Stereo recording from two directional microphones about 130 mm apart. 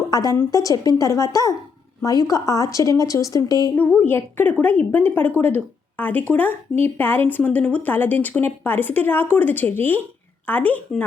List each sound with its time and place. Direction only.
0.1 s a woman's voice: 30° left (ahead or behind)
3.8 s a woman's voice: 15° left (ahead or behind)